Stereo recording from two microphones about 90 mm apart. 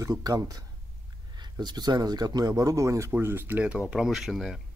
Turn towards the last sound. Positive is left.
turn(degrees=0)  # may be behind; listen again after turning